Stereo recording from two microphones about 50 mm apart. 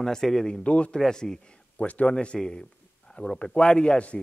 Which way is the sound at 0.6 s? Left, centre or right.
Left.